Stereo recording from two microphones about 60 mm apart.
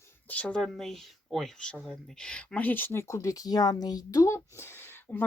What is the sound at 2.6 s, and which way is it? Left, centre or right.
Speech, left.